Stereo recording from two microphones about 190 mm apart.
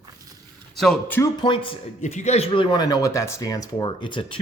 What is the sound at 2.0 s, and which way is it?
Speech, 40° left (ahead or behind).